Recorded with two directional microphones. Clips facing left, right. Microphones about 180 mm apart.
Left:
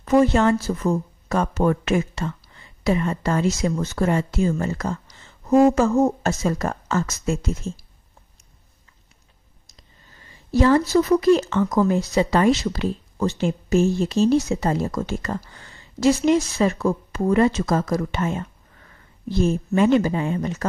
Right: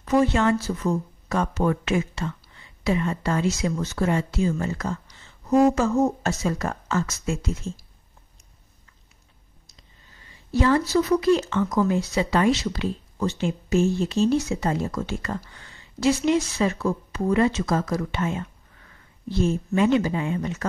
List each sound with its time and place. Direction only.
0.0 s speech: 45° left (ahead or behind)
10.5 s speech: 40° left (ahead or behind)